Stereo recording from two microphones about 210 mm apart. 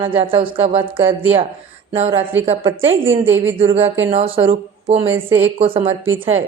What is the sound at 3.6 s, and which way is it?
Speech, 25° right (ahead or behind).